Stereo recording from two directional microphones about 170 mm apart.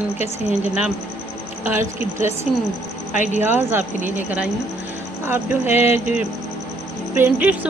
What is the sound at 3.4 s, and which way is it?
A woman's voice, 15° right (ahead or behind).